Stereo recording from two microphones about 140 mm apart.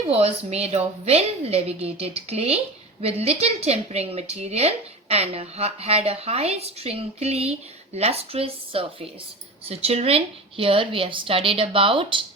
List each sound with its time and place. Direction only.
0.1 s a woman's voice: 45° right (ahead or behind)